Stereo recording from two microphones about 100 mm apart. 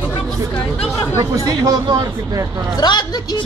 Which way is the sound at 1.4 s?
40° right (ahead or behind).